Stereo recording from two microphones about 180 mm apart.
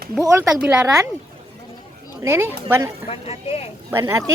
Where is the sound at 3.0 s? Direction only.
35° left (ahead or behind).